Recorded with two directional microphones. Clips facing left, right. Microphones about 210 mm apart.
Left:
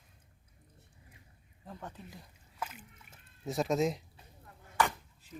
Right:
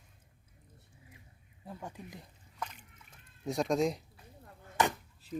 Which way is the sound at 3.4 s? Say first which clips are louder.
Even; centre (ahead or behind).